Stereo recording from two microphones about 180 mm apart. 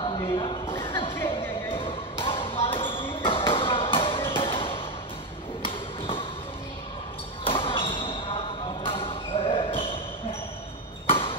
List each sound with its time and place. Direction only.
0.0 s a sound: 30° left (ahead or behind)
7.4 s basketball bounce: 30° left (ahead or behind)
11.1 s chop: 30° left (ahead or behind)